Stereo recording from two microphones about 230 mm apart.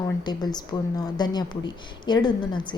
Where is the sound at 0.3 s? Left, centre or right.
Centre.